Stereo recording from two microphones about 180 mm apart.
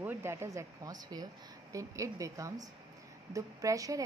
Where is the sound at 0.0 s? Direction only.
10° right (ahead or behind).